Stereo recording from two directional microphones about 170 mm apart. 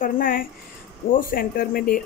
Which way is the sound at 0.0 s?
55° left (ahead or behind).